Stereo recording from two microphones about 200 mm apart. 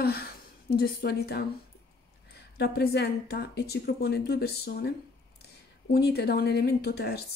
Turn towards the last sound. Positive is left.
turn(degrees=50)  # may be behind; listen again after turning